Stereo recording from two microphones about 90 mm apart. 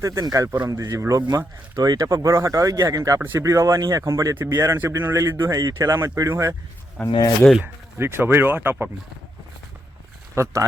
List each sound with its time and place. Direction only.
0.0 s speech: 40° right (ahead or behind)
7.0 s speech: centre (ahead or behind)
7.6 s speech: 25° right (ahead or behind)
10.3 s speech: 35° right (ahead or behind)